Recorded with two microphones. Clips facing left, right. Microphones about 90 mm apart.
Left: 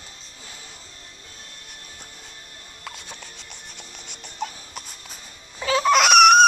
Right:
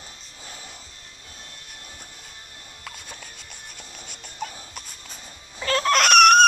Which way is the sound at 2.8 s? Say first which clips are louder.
Left 2 dB; centre (ahead or behind).